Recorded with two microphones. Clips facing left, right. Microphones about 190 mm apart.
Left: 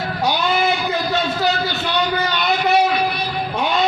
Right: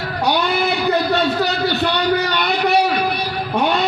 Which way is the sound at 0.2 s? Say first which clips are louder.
Right 1 dB; 65° right (ahead or behind).